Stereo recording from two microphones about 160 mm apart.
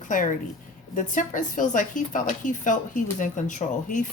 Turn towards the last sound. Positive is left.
turn(degrees=50)  # may be behind; listen again after turning